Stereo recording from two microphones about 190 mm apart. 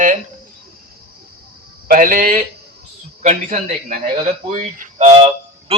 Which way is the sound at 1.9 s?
45° right (ahead or behind).